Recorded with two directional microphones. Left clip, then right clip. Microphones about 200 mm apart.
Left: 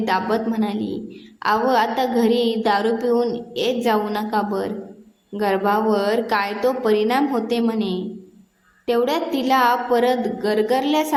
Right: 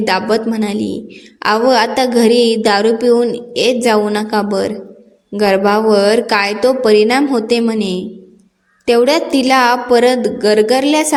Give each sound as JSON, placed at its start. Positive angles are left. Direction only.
{"t": 0.0, "sound": "a woman's voice", "side_deg": -30}